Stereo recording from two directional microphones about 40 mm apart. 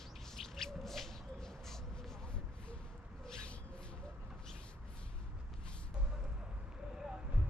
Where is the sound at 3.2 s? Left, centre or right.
Left.